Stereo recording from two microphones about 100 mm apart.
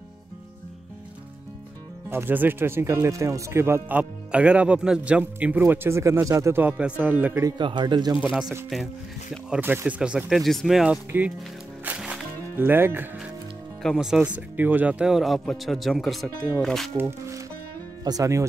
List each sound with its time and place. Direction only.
2.0 s speech: 20° right (ahead or behind)
4.0 s speech: 10° right (ahead or behind)
7.5 s speech: 50° right (ahead or behind)
9.6 s speech: 20° right (ahead or behind)
11.1 s speech: 15° right (ahead or behind)
12.0 s music: 5° right (ahead or behind)
12.5 s speech: 20° right (ahead or behind)
13.9 s a man's voice: 5° right (ahead or behind)
16.9 s speech: 25° right (ahead or behind)
18.0 s speech: 35° right (ahead or behind)